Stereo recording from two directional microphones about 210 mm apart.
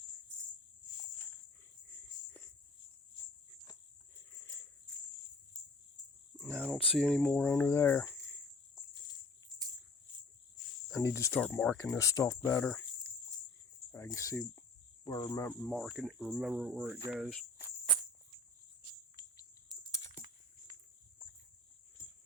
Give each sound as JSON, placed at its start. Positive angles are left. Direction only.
{"t": 6.4, "sound": "cricket", "side_deg": -10}
{"t": 7.0, "sound": "speech", "side_deg": 5}
{"t": 11.0, "sound": "speech", "side_deg": 15}
{"t": 13.9, "sound": "speech", "side_deg": 15}
{"t": 15.0, "sound": "cricket", "side_deg": 20}
{"t": 15.4, "sound": "cricket", "side_deg": 0}